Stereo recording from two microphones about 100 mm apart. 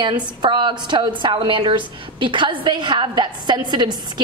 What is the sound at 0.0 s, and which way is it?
A woman's voice, 50° right (ahead or behind).